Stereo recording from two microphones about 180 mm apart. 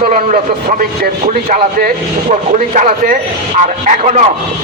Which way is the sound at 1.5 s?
55° right (ahead or behind).